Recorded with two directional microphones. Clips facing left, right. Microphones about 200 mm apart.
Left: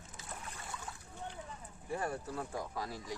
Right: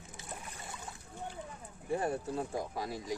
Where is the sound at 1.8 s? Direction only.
25° right (ahead or behind).